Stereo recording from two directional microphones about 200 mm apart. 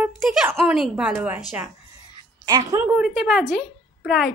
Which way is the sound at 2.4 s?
20° right (ahead or behind).